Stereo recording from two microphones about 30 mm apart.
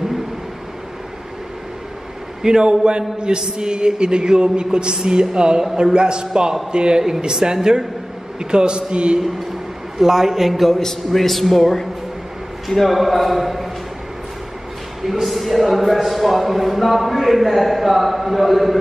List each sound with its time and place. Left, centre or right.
2.4 s a man's voice: right
9.9 s a man's voice: centre
10.5 s a man's voice: centre
10.8 s a man's voice: centre
15.0 s a man's voice: centre